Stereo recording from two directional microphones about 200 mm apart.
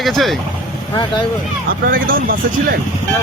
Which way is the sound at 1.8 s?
45° right (ahead or behind).